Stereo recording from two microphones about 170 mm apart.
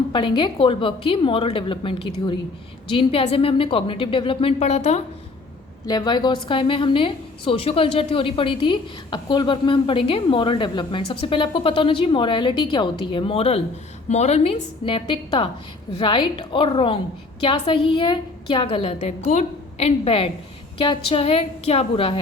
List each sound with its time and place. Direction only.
0.1 s a woman's voice: 30° left (ahead or behind)
5.8 s a woman's voice: 25° left (ahead or behind)
18.9 s a woman's voice: 45° left (ahead or behind)